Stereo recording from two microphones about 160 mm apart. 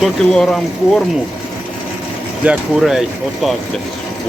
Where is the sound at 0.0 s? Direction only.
5° left (ahead or behind).